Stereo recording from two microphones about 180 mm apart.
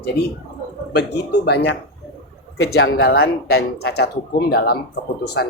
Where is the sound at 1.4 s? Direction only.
70° left (ahead or behind).